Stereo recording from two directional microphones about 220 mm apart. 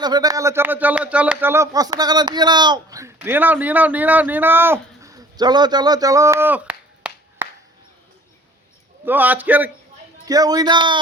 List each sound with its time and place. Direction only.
0.0 s speech: 20° right (ahead or behind)
9.0 s a man's voice: 10° right (ahead or behind)